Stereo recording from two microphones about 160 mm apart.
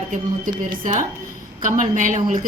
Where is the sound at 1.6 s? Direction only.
50° right (ahead or behind).